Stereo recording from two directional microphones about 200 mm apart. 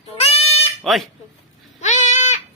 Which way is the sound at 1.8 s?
35° left (ahead or behind).